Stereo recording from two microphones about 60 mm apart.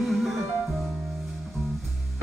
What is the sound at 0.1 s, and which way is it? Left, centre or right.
Music, centre.